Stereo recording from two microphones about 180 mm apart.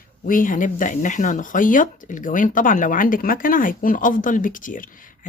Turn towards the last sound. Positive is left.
turn(degrees=50)  # may be behind; listen again after turning